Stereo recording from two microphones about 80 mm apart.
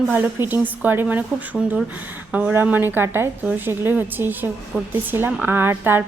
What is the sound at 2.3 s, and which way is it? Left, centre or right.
A woman's voice, centre.